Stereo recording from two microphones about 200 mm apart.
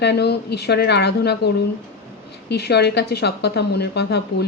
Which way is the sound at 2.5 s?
55° left (ahead or behind).